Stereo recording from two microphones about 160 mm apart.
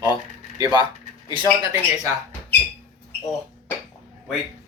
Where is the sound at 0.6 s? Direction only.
30° right (ahead or behind).